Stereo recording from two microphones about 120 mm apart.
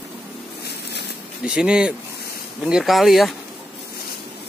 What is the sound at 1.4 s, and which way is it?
Speech, 5° right (ahead or behind).